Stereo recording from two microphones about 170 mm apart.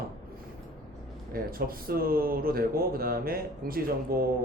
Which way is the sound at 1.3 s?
60° right (ahead or behind).